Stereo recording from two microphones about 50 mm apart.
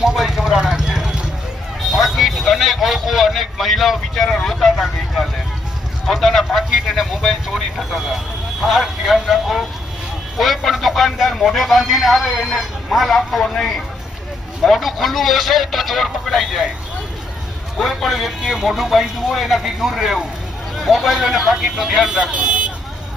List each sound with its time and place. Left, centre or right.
0.0 s vehicle: centre
1.9 s a sound: centre
6.1 s speech: centre
17.7 s speech: centre
22.1 s speech: centre